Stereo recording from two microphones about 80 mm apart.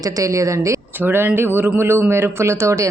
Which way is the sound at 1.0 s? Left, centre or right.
Right.